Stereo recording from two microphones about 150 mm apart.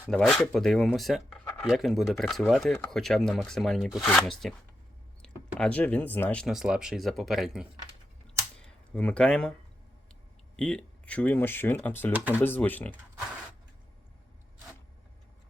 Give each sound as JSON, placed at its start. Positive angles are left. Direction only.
{"t": 0.0, "sound": "speech", "side_deg": 5}
{"t": 10.6, "sound": "speech", "side_deg": 5}
{"t": 12.1, "sound": "speech", "side_deg": -10}
{"t": 12.4, "sound": "speech", "side_deg": 15}